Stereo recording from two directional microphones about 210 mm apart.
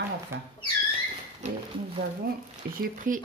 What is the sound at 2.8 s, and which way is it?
Speech, 40° right (ahead or behind).